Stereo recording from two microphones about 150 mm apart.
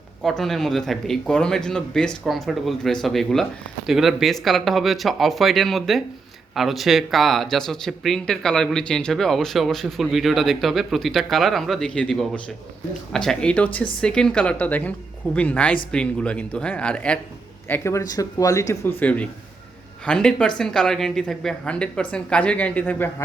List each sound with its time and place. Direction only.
0.2 s speech: centre (ahead or behind)
17.7 s speech: 20° left (ahead or behind)